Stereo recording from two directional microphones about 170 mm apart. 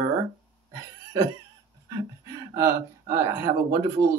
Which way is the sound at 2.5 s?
20° right (ahead or behind).